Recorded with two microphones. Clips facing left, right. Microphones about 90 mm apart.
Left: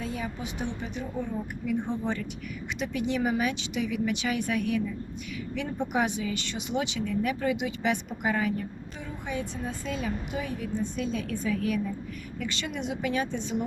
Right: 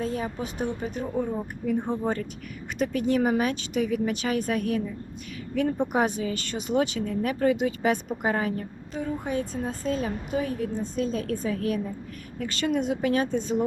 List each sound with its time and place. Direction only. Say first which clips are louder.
0.0 s a woman's voice: right 4 dB; 40° right (ahead or behind)